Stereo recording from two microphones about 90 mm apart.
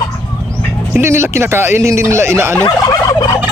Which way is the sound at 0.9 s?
30° right (ahead or behind).